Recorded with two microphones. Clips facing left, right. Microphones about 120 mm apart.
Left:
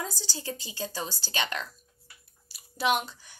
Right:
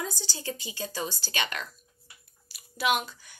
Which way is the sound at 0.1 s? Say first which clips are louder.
Right 1 dB; 35° left (ahead or behind).